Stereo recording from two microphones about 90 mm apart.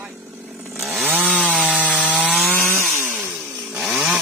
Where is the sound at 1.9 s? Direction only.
10° right (ahead or behind).